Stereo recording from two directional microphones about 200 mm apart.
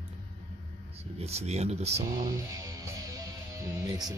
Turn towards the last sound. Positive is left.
turn(degrees=-15)  # may be behind; listen again after turning